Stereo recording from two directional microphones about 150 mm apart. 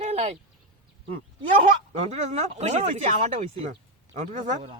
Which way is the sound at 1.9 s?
50° right (ahead or behind).